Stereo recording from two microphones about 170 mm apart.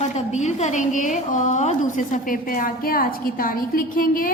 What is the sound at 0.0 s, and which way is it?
A woman's voice, 40° left (ahead or behind).